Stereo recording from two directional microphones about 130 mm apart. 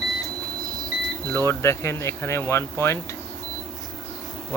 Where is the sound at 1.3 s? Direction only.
20° left (ahead or behind).